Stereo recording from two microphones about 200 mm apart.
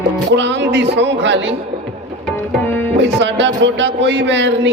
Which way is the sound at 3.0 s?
65° right (ahead or behind).